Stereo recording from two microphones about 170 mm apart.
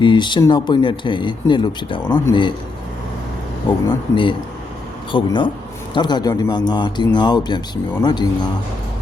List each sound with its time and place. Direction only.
0.0 s speech: 25° left (ahead or behind)
3.8 s speech: 30° left (ahead or behind)